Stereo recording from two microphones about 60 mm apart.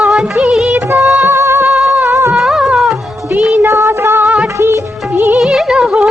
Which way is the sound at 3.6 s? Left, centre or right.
Right.